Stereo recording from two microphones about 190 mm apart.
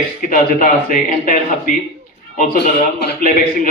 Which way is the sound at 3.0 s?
45° left (ahead or behind).